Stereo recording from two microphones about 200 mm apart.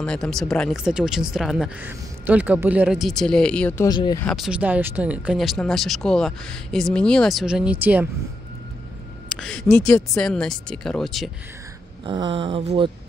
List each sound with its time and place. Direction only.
0.0 s speech: 5° left (ahead or behind)
3.8 s speech: 20° left (ahead or behind)
4.2 s speech: centre (ahead or behind)
9.4 s speech: 5° left (ahead or behind)
12.1 s speech: 25° right (ahead or behind)